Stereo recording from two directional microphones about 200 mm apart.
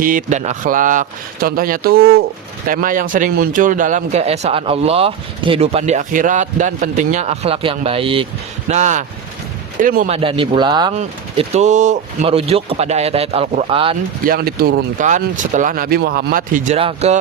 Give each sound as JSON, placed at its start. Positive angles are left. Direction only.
{"t": 0.0, "sound": "a man's voice", "side_deg": -40}
{"t": 10.2, "sound": "speech", "side_deg": -25}
{"t": 10.9, "sound": "a man's voice", "side_deg": -35}
{"t": 14.3, "sound": "speech", "side_deg": -50}
{"t": 15.0, "sound": "a man's voice", "side_deg": -40}